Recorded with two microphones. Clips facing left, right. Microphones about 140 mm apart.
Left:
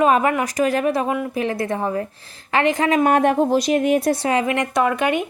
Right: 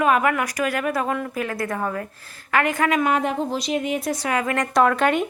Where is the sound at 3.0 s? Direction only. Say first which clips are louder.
Left 6 dB; 55° left (ahead or behind).